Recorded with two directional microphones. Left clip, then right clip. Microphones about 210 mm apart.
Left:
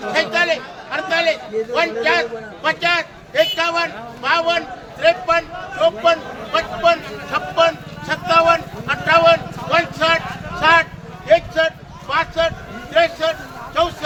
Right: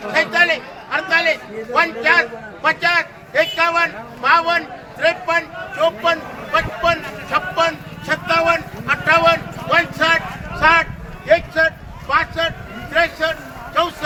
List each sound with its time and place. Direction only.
0.1 s a man's voice: centre (ahead or behind)
10.6 s a sound: centre (ahead or behind)
12.9 s a man's voice: 10° right (ahead or behind)